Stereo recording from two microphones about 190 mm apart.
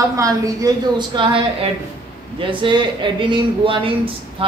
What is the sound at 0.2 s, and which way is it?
A woman's voice, 15° right (ahead or behind).